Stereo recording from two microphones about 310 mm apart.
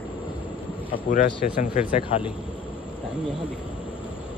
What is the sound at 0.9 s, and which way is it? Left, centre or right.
Speech, left.